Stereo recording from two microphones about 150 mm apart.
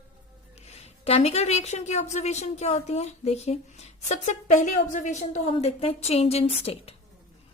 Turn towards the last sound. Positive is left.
turn(degrees=40)  # may be behind; listen again after turning